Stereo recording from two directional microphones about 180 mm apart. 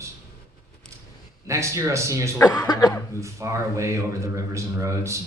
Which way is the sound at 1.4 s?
15° right (ahead or behind).